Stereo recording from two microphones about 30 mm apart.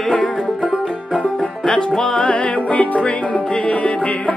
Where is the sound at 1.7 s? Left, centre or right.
Left.